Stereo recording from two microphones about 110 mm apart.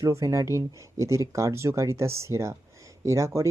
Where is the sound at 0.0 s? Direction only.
25° right (ahead or behind).